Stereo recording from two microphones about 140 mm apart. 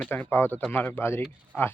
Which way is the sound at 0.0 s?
15° left (ahead or behind).